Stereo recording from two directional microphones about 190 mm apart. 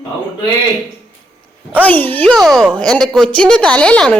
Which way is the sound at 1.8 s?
10° left (ahead or behind).